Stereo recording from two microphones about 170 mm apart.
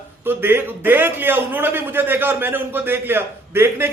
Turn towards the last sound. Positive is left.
turn(degrees=-15)  # may be behind; listen again after turning